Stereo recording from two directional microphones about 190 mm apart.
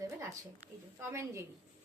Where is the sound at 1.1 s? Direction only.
15° right (ahead or behind).